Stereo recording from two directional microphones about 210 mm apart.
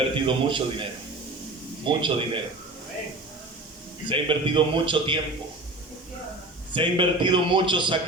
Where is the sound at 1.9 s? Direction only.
25° right (ahead or behind).